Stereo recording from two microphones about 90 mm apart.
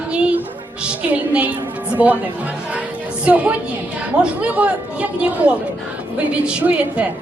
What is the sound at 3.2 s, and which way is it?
A woman's voice, 15° right (ahead or behind).